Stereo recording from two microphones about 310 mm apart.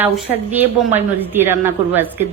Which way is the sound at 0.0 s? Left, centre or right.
Centre.